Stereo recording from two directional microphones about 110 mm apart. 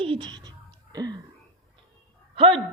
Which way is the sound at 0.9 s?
40° right (ahead or behind).